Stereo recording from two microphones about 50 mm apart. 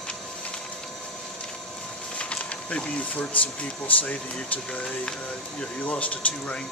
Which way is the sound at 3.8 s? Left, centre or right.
Left.